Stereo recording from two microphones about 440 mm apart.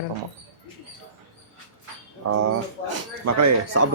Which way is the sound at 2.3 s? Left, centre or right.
Right.